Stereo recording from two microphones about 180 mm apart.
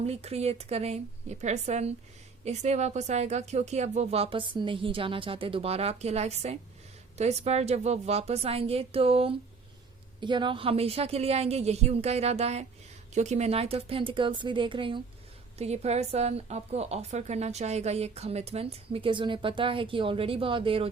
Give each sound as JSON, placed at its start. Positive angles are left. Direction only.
{"t": 0.0, "sound": "a woman's voice", "side_deg": -35}